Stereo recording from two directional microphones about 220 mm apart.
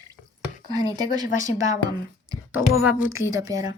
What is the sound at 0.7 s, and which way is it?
Speech, 15° right (ahead or behind).